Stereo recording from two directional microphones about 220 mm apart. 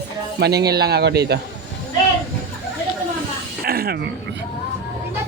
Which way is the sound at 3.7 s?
45° right (ahead or behind).